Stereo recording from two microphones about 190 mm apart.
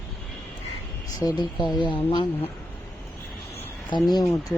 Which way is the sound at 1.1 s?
20° left (ahead or behind).